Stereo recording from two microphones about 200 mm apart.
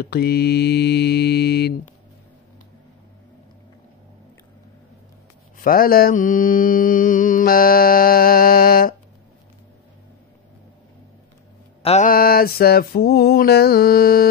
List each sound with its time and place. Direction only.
0.0 s mantra: 50° left (ahead or behind)
5.6 s mantra: 45° left (ahead or behind)
11.8 s mantra: 30° left (ahead or behind)
12.1 s mantra: 50° left (ahead or behind)